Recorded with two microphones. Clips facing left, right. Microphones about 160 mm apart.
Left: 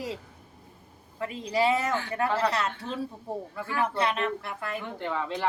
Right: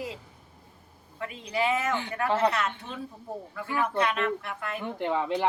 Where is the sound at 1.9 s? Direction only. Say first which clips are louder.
Left 1 dB; 20° right (ahead or behind).